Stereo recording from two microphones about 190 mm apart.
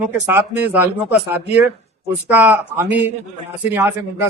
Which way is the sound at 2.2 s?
10° right (ahead or behind).